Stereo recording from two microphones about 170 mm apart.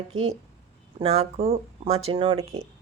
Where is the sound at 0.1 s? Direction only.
35° right (ahead or behind).